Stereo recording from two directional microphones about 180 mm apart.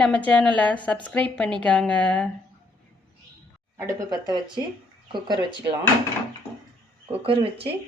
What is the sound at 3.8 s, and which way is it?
Speech, 20° right (ahead or behind).